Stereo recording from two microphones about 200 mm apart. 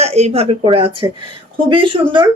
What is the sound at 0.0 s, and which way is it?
A woman's voice, 30° right (ahead or behind).